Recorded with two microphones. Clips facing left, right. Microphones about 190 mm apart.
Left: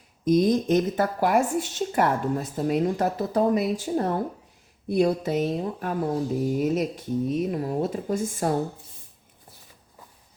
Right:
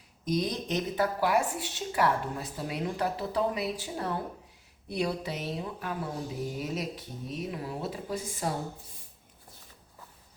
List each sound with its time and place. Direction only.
0.3 s speech: 50° left (ahead or behind)